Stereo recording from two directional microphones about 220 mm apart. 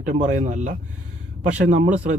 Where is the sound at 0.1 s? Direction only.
35° right (ahead or behind).